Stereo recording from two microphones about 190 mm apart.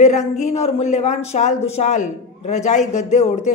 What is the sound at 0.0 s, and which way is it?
Speech, 35° left (ahead or behind).